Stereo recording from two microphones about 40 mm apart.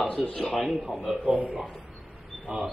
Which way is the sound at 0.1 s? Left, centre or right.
Centre.